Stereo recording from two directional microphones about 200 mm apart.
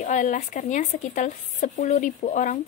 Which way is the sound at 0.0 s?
40° left (ahead or behind).